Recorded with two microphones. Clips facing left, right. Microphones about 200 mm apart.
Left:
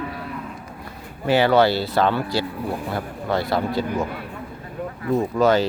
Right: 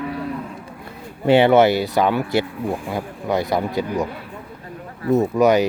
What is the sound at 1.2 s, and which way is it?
Speech, 25° right (ahead or behind).